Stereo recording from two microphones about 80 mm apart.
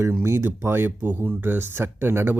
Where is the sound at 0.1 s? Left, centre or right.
Right.